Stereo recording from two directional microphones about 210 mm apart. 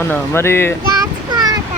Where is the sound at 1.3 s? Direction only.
20° right (ahead or behind).